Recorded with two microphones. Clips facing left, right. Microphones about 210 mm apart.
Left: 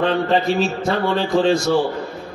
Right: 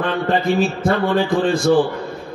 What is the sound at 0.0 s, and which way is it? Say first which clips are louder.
A man's voice: left 1 dB; 55° right (ahead or behind).